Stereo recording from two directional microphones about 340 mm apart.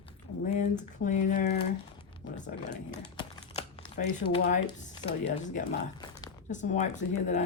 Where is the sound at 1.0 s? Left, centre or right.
Left.